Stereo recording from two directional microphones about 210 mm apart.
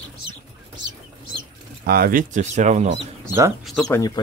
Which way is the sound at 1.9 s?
45° right (ahead or behind).